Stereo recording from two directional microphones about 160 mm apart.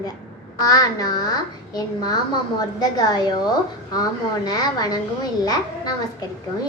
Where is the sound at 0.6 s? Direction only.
20° left (ahead or behind).